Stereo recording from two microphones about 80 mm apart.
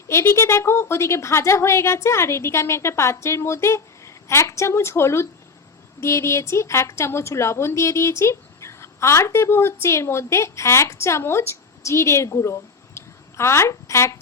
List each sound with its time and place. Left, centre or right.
0.1 s a woman's voice: left